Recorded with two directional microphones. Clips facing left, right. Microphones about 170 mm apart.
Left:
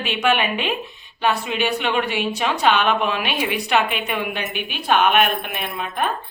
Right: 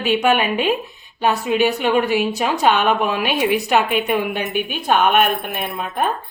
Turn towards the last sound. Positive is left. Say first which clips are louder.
# right 3 dB
turn(degrees=-45)  # may be behind; listen again after turning